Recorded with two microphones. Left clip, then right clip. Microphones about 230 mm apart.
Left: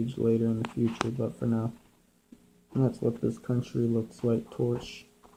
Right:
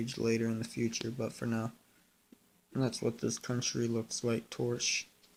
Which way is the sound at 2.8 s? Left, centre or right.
Right.